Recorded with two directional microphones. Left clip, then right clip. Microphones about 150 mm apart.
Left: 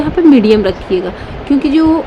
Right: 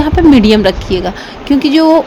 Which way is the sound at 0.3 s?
45° right (ahead or behind).